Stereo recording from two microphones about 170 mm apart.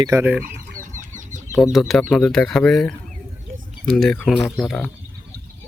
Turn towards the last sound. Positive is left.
turn(degrees=5)  # may be behind; listen again after turning